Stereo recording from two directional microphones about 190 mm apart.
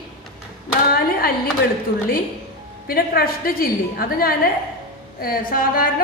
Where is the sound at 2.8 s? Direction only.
55° left (ahead or behind).